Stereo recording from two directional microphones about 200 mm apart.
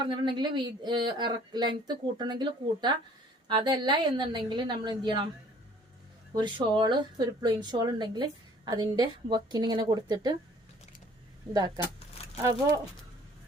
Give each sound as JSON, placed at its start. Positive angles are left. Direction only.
{"t": 0.0, "sound": "a woman's voice", "side_deg": -25}
{"t": 6.3, "sound": "a woman's voice", "side_deg": -25}
{"t": 11.5, "sound": "speech", "side_deg": -15}
{"t": 11.9, "sound": "keys jangling", "side_deg": 30}
{"t": 12.4, "sound": "speech", "side_deg": -15}